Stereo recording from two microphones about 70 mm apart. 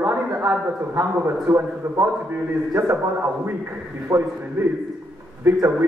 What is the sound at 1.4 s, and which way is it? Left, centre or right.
Speech, right.